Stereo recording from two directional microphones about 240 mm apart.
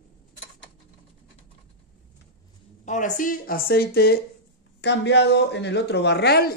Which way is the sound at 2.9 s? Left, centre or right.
Left.